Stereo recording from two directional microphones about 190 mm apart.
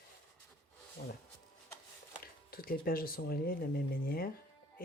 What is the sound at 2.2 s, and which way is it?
Speech, 50° left (ahead or behind).